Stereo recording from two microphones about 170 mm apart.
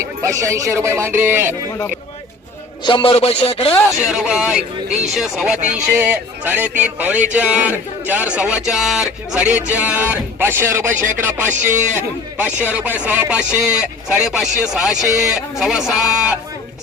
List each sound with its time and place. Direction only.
0.0 s speech: 20° right (ahead or behind)
2.8 s speech: 30° left (ahead or behind)
3.8 s speech: 5° right (ahead or behind)